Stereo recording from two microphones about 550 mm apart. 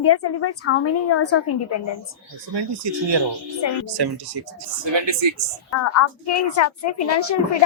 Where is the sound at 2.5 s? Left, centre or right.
Right.